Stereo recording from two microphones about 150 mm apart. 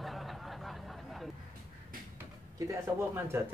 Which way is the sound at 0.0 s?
Centre (ahead or behind).